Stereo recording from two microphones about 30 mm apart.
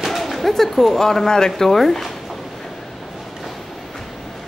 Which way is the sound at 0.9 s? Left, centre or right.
Centre.